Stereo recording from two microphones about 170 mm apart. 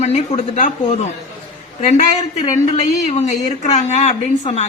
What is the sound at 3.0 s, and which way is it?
A woman's voice, 40° left (ahead or behind).